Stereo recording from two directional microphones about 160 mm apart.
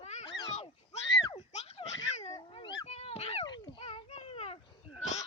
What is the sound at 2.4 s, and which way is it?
Dog, 30° left (ahead or behind).